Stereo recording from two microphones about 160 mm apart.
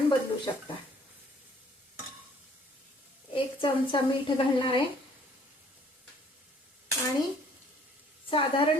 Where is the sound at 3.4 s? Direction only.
30° left (ahead or behind).